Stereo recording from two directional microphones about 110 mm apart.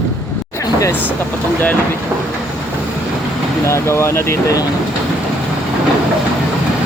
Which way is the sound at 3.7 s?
25° left (ahead or behind).